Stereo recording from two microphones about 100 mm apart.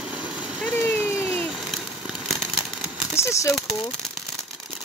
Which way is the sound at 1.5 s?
5° right (ahead or behind).